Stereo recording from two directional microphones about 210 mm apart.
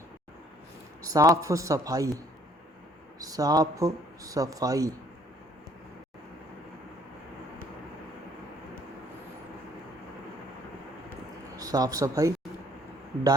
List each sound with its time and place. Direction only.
1.0 s speech: 15° right (ahead or behind)
11.5 s speech: 15° right (ahead or behind)